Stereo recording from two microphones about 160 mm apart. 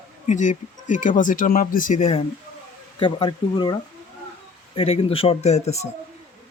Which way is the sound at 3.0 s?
30° left (ahead or behind).